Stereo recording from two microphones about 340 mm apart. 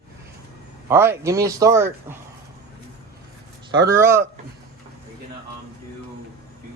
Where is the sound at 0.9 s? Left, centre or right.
Centre.